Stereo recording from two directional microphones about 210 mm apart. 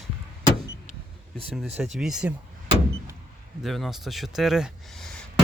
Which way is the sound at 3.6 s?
Centre (ahead or behind).